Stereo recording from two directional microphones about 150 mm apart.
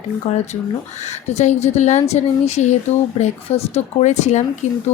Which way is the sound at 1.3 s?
45° left (ahead or behind).